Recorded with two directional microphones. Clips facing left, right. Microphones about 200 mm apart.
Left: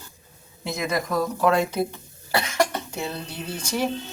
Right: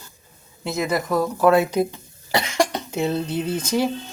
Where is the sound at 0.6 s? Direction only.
Centre (ahead or behind).